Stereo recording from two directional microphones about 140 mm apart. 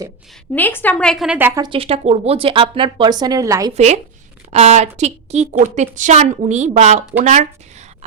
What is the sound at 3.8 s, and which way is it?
A woman's voice, 50° right (ahead or behind).